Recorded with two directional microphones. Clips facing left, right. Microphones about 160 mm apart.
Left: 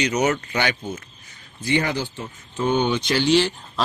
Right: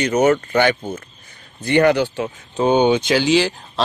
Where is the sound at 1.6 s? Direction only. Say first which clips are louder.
Right 8 dB; 60° right (ahead or behind).